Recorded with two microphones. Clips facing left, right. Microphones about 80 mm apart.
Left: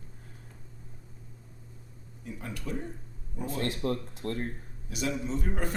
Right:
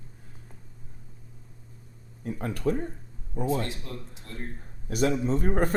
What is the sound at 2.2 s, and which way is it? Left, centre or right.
Speech, right.